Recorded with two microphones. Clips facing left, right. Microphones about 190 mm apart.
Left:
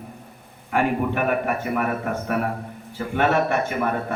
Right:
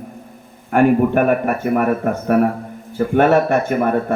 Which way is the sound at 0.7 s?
50° right (ahead or behind).